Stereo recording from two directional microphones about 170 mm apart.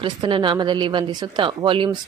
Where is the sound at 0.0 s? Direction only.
30° right (ahead or behind).